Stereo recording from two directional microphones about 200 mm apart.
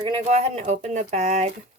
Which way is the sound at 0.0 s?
30° right (ahead or behind).